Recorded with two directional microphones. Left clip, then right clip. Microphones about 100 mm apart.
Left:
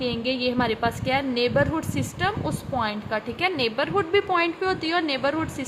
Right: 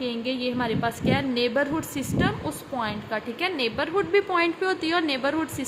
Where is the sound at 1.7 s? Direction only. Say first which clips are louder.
Even; 15° left (ahead or behind).